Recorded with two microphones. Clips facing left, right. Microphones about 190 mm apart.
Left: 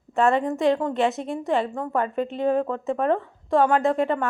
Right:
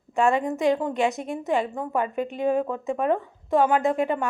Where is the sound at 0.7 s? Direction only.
5° right (ahead or behind).